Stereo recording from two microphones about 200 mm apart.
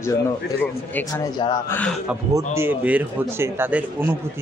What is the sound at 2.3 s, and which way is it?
A man's voice, 10° right (ahead or behind).